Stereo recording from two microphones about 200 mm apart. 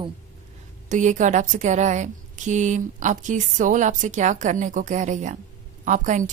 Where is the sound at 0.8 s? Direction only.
40° right (ahead or behind).